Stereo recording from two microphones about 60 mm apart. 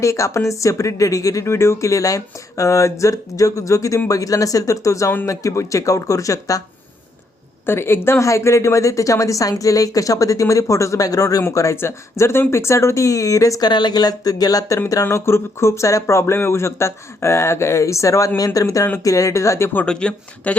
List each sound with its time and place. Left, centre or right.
0.0 s a woman's voice: left
1.5 s a woman's voice: left
7.7 s speech: left
8.2 s a woman's voice: left
11.5 s a woman's voice: left
11.8 s a woman's voice: left
15.1 s speech: left
18.3 s a woman's voice: left
19.8 s speech: centre